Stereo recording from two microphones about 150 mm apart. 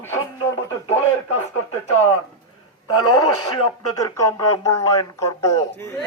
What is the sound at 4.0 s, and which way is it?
A man's voice, 20° left (ahead or behind).